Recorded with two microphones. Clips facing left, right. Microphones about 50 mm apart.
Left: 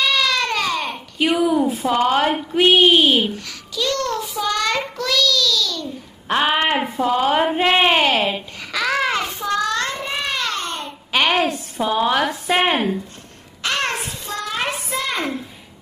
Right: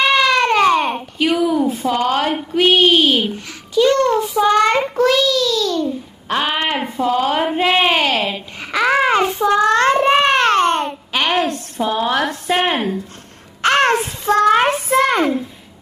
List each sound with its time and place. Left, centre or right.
0.0 s baby cry: right
1.1 s speech: centre
3.7 s child singing: right
6.2 s speech: centre
8.7 s child singing: right
11.1 s speech: centre
13.6 s child singing: right
14.4 s child singing: right
14.7 s a sound: right